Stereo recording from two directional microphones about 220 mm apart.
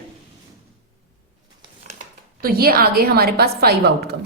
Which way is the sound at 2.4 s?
40° right (ahead or behind).